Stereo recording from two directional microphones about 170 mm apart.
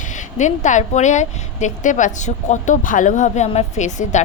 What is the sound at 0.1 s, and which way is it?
A woman's voice, 45° left (ahead or behind).